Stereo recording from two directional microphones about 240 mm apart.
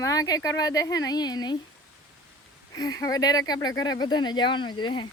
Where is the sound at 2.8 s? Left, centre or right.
Centre.